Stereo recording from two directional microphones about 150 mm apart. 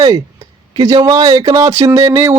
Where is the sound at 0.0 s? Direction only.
25° right (ahead or behind).